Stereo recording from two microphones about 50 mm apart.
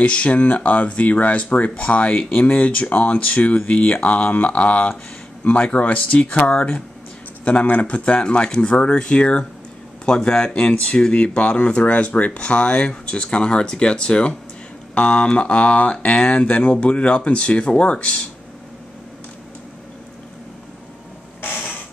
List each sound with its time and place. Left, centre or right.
0.0 s speech: left
21.4 s creak: left